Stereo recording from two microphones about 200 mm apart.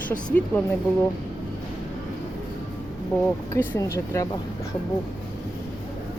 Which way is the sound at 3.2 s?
10° left (ahead or behind).